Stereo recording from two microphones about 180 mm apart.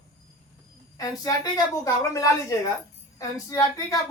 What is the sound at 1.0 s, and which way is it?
Speech, 20° left (ahead or behind).